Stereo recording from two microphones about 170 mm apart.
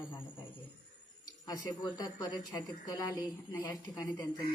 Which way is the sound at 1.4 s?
25° left (ahead or behind).